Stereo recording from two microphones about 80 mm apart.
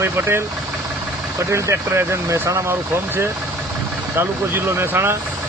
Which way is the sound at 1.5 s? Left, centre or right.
Right.